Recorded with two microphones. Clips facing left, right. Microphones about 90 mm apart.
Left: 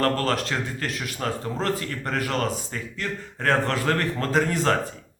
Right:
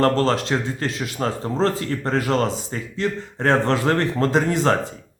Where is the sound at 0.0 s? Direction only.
25° right (ahead or behind).